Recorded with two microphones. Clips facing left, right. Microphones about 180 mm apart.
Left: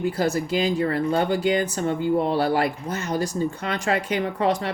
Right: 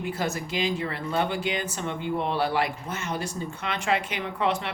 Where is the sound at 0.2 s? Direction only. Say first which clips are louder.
Left 5 dB; 40° left (ahead or behind).